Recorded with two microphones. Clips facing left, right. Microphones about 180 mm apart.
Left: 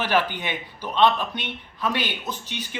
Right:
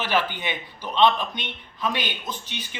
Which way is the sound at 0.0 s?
15° left (ahead or behind).